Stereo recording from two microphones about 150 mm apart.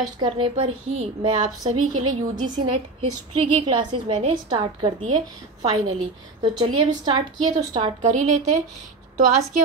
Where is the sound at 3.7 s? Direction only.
30° right (ahead or behind).